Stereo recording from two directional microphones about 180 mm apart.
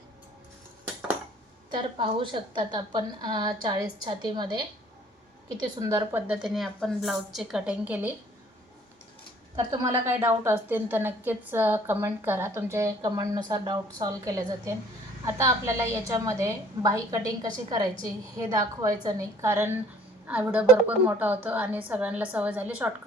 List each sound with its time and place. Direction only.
1.7 s a woman's voice: 25° right (ahead or behind)
5.8 s a woman's voice: 20° right (ahead or behind)
9.7 s a woman's voice: 15° right (ahead or behind)